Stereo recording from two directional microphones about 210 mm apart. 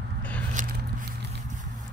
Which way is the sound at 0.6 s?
40° right (ahead or behind).